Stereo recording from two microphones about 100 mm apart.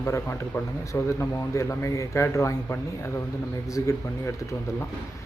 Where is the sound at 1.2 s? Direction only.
30° left (ahead or behind).